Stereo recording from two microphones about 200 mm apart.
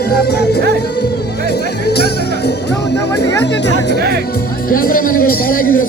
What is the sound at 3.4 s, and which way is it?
Music, 60° left (ahead or behind).